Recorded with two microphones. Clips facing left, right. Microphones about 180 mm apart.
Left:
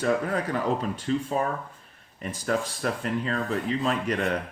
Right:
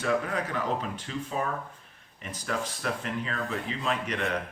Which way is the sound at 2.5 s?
40° left (ahead or behind).